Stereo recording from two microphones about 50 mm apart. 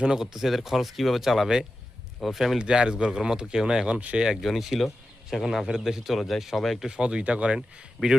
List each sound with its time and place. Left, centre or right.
0.0 s speech: centre
2.6 s speech: centre
4.2 s speech: centre
4.4 s speech: centre
6.8 s speech: centre